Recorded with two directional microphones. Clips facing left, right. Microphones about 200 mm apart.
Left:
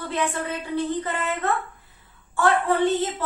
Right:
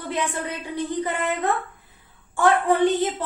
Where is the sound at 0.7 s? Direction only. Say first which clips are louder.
Even; 15° right (ahead or behind).